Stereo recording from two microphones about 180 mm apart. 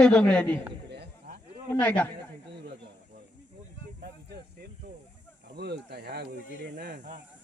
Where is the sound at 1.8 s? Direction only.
10° left (ahead or behind).